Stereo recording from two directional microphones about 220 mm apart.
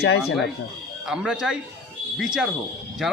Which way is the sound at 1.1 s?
5° right (ahead or behind).